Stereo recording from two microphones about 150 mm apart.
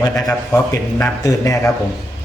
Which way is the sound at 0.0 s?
20° left (ahead or behind).